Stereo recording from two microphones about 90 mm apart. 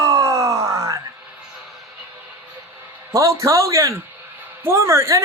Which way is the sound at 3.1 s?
35° right (ahead or behind).